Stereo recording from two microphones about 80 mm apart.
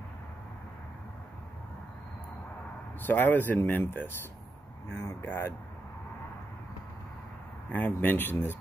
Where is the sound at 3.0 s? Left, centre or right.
Left.